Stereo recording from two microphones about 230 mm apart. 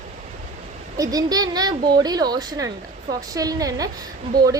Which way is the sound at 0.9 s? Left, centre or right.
Centre.